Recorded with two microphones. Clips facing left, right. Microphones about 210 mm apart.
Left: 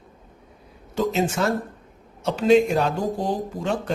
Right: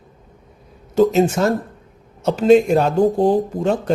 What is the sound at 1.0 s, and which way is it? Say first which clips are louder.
A man's voice: right 8 dB; 40° right (ahead or behind).